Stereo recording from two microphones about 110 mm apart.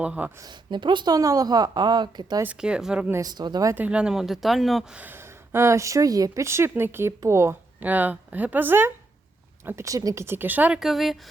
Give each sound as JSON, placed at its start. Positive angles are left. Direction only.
{"t": 0.0, "sound": "speech", "side_deg": -15}
{"t": 0.4, "sound": "a woman's voice", "side_deg": -45}
{"t": 2.4, "sound": "speech", "side_deg": -10}
{"t": 3.1, "sound": "a woman's voice", "side_deg": -35}
{"t": 3.8, "sound": "speech", "side_deg": -10}
{"t": 4.9, "sound": "a woman's voice", "side_deg": -20}
{"t": 7.8, "sound": "a woman's voice", "side_deg": -15}
{"t": 10.2, "sound": "speech", "side_deg": -20}
{"t": 10.8, "sound": "speech", "side_deg": 0}